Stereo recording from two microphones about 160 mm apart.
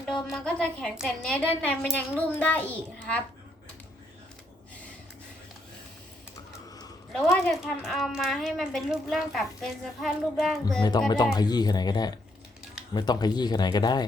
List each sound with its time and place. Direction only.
0.0 s a woman's voice: centre (ahead or behind)
7.1 s speech: centre (ahead or behind)
11.1 s speech: 25° left (ahead or behind)